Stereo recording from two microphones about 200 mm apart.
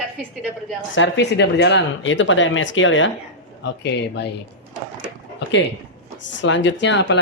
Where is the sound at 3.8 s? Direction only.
60° left (ahead or behind).